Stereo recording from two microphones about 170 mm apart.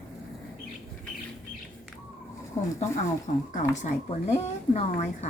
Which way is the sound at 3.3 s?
45° left (ahead or behind).